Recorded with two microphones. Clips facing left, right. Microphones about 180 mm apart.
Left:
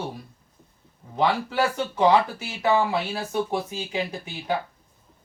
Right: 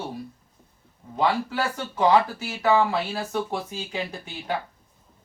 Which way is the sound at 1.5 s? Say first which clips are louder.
Left 4 dB; 20° left (ahead or behind).